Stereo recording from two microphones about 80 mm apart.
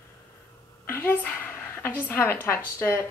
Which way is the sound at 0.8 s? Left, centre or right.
Left.